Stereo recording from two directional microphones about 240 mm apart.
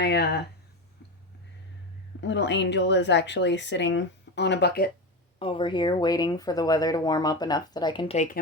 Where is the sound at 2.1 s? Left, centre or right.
Left.